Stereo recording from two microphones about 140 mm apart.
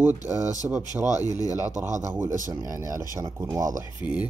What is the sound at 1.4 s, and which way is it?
Speech, 25° left (ahead or behind).